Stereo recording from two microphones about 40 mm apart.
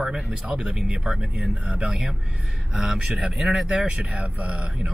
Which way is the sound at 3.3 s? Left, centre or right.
Centre.